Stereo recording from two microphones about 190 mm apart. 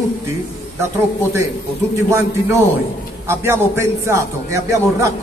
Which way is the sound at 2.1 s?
15° right (ahead or behind).